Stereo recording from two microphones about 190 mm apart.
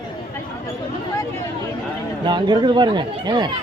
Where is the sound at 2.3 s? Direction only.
25° right (ahead or behind).